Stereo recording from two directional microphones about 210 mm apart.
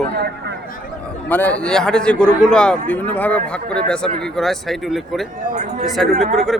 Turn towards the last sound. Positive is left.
turn(degrees=0)  # may be behind; listen again after turning